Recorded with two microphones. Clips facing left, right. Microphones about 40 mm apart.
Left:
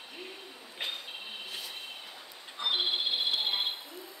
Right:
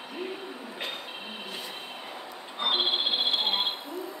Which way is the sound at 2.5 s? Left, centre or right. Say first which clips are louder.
Right 4 dB; right.